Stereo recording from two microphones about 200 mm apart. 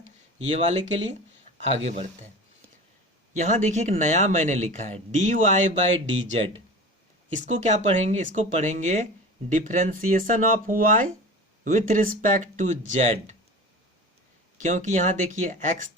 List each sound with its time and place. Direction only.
0.4 s speech: 30° right (ahead or behind)
3.3 s speech: 40° right (ahead or behind)
7.3 s speech: 35° right (ahead or behind)
14.6 s speech: 40° right (ahead or behind)